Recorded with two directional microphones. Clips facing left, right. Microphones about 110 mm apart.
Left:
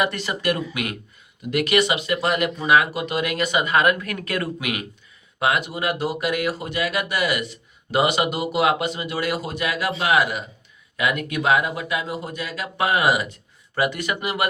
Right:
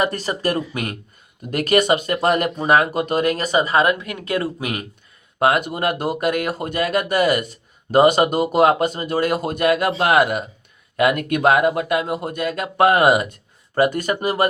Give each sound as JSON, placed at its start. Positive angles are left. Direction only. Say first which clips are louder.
{"t": 0.0, "sound": "speech", "louder": "right 2 dB", "side_deg": -40}
{"t": 4.6, "sound": "speech", "louder": "right 2 dB", "side_deg": -40}